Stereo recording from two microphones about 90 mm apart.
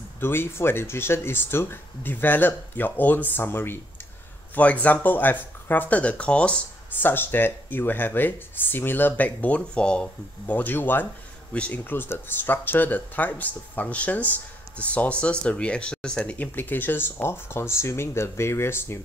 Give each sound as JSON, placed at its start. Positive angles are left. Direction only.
{"t": 0.2, "sound": "speech", "side_deg": 25}